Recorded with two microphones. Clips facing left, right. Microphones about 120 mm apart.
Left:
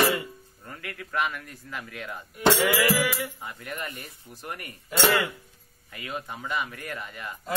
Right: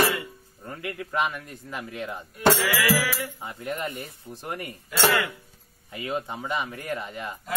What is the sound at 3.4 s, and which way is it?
A man's voice, 25° right (ahead or behind).